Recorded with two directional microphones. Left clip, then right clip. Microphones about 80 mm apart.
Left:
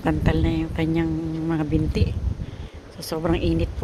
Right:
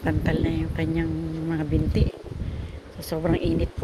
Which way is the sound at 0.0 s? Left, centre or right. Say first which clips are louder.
Left 2 dB; left.